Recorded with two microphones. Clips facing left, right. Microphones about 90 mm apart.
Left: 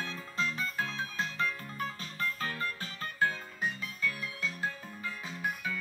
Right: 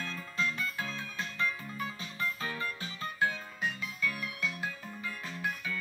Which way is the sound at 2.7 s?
45° left (ahead or behind).